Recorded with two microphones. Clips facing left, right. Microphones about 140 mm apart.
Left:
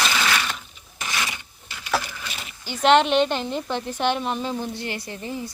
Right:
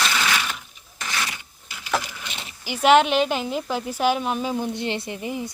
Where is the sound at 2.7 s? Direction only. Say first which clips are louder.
Right 1 dB; 10° right (ahead or behind).